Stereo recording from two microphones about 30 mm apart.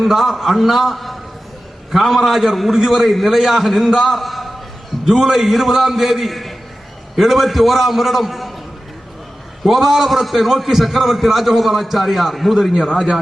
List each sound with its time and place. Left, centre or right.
0.0 s a man's voice: centre
5.0 s a man's voice: centre
9.6 s a man's voice: centre